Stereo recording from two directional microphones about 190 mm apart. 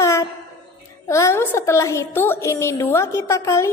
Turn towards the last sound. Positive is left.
turn(degrees=15)  # may be behind; listen again after turning